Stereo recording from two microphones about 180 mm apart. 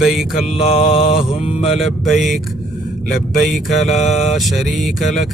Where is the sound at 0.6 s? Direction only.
35° left (ahead or behind).